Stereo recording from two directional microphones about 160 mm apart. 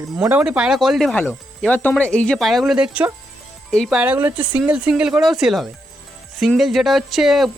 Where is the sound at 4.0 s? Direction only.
10° right (ahead or behind).